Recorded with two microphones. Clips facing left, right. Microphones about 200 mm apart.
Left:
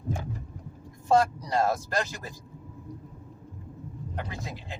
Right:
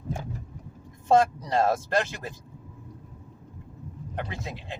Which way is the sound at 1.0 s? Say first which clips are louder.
Right 2 dB; 25° right (ahead or behind).